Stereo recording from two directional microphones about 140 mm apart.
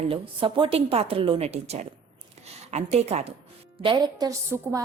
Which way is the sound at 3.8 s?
35° right (ahead or behind).